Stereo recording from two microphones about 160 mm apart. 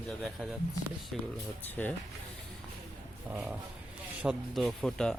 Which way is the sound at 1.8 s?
10° left (ahead or behind).